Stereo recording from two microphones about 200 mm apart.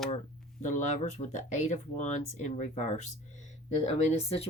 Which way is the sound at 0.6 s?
40° left (ahead or behind).